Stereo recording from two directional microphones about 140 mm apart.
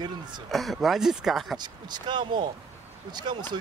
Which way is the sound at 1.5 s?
30° right (ahead or behind).